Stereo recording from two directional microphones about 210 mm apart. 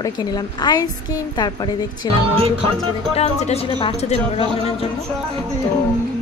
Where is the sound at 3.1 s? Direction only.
30° left (ahead or behind).